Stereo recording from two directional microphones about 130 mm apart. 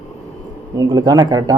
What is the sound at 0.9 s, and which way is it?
Speech, 30° right (ahead or behind).